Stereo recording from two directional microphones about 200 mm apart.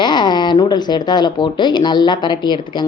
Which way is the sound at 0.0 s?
20° left (ahead or behind).